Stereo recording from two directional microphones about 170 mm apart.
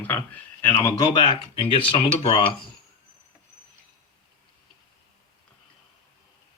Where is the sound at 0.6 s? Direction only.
15° left (ahead or behind); by 2.4 s 30° left (ahead or behind).